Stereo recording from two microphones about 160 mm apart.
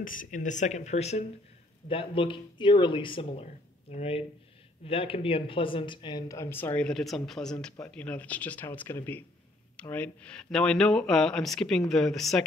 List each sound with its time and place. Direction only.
0.0 s speech: 55° left (ahead or behind); by 12.4 s centre (ahead or behind)